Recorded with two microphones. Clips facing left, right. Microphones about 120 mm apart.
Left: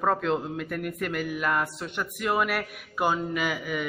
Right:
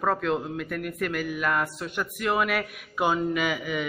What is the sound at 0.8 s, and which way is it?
Speech, 20° left (ahead or behind).